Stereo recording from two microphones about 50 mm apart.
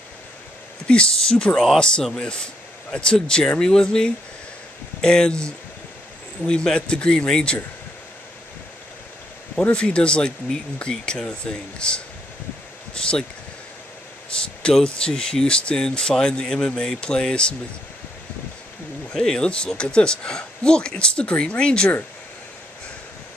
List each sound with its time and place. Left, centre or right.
0.9 s speech: centre
9.6 s speech: left
14.3 s a sound: centre
14.9 s speech: centre
19.1 s speech: centre